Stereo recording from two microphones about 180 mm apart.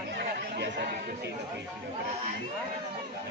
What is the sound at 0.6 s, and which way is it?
Chatter, 65° right (ahead or behind).